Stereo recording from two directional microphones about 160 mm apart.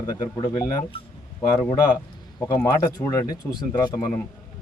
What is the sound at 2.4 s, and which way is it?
Speech, 20° left (ahead or behind).